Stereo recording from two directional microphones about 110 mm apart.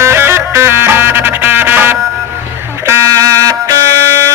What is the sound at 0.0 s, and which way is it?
Music, 20° right (ahead or behind).